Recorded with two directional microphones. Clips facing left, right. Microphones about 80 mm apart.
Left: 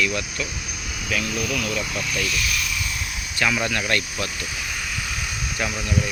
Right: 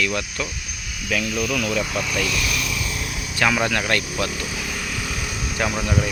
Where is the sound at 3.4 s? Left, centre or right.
Right.